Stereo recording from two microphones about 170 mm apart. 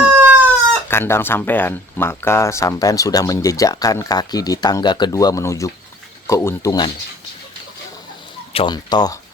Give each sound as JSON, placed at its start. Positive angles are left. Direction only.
{"t": 0.0, "sound": "chicken", "side_deg": -10}
{"t": 0.9, "sound": "speech", "side_deg": 15}
{"t": 8.5, "sound": "speech", "side_deg": 25}